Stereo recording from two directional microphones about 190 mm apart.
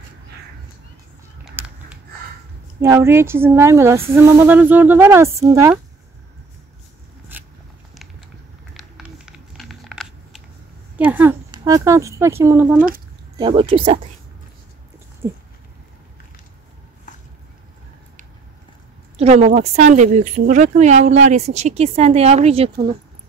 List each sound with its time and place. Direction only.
1.4 s a sound: 10° right (ahead or behind)
2.8 s speech: 15° right (ahead or behind)
7.3 s biting: 10° right (ahead or behind)
8.7 s a sound: centre (ahead or behind)
11.0 s speech: 10° right (ahead or behind)
12.7 s speech: 45° right (ahead or behind)
13.4 s speech: 25° right (ahead or behind)
19.1 s speech: 35° right (ahead or behind)